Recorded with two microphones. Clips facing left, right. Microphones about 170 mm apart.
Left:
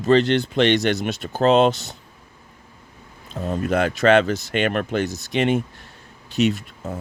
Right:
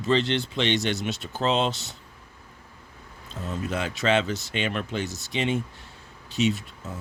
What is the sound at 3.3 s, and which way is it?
Speech, 60° left (ahead or behind).